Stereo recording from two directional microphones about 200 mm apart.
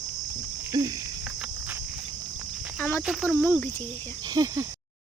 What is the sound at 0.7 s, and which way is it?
Cricket, 20° right (ahead or behind).